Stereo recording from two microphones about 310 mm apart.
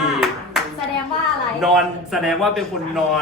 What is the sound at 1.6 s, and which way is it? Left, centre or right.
A man's voice, centre.